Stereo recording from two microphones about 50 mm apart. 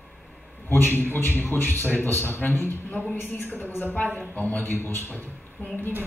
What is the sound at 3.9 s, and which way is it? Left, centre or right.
Speech, left.